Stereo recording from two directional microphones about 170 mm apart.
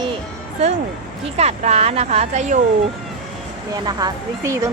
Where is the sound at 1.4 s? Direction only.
40° right (ahead or behind).